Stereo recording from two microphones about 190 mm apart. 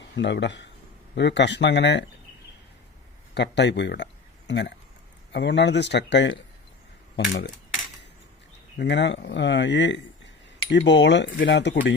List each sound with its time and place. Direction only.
0.2 s speech: 65° left (ahead or behind)
3.3 s speech: 65° left (ahead or behind)
8.8 s speech: 65° left (ahead or behind)